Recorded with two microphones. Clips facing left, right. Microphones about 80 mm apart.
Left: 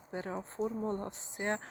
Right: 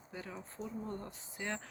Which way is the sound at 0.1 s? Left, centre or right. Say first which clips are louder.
Left 8 dB; left.